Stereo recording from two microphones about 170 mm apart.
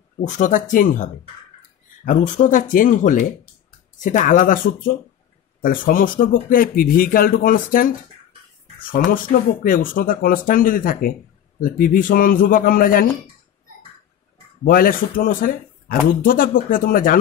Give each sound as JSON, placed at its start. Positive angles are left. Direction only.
{"t": 0.2, "sound": "a man's voice", "side_deg": 50}
{"t": 8.9, "sound": "a man's voice", "side_deg": 55}
{"t": 14.6, "sound": "speech", "side_deg": 55}